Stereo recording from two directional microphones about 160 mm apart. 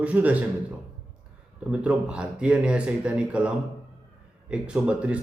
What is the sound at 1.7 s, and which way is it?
Speech, 5° right (ahead or behind).